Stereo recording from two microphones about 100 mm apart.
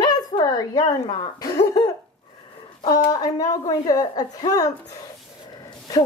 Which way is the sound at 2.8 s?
40° left (ahead or behind).